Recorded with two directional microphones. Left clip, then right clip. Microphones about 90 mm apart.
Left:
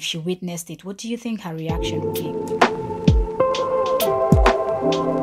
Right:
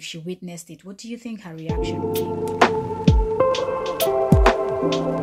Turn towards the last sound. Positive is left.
turn(degrees=0)  # may be behind; listen again after turning